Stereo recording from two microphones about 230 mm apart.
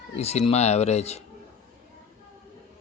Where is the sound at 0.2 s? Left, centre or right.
Left.